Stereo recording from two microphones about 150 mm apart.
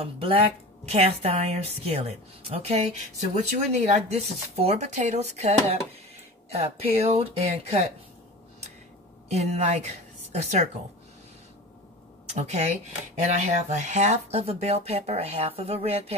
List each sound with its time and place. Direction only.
0.0 s speech: 35° right (ahead or behind)
9.3 s a woman's voice: 50° right (ahead or behind)
12.3 s speech: 50° right (ahead or behind)